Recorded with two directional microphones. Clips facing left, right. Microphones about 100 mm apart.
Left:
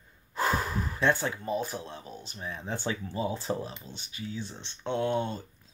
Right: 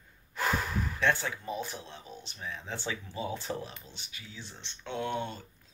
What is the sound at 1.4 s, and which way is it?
Speech, 40° left (ahead or behind).